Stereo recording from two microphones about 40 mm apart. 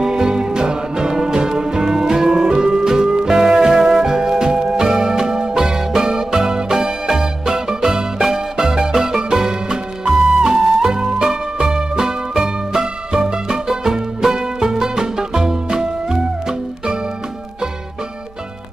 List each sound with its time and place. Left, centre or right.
0.0 s music: centre